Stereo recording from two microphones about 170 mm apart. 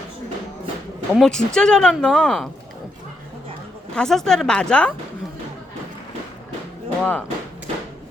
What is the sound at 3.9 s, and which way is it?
Speech, 5° left (ahead or behind).